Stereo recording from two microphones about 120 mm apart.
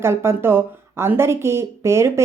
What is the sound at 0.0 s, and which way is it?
Speech, 20° right (ahead or behind).